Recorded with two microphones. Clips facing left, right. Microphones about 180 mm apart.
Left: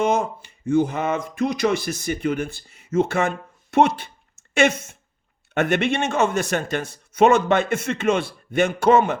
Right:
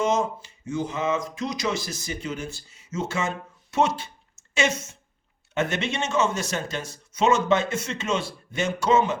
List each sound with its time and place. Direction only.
0.0 s speech: 60° left (ahead or behind)